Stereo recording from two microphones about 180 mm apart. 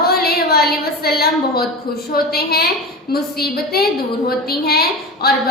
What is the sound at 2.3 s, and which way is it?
A woman's voice, 60° left (ahead or behind).